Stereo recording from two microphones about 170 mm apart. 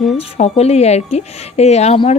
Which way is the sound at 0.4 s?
40° left (ahead or behind).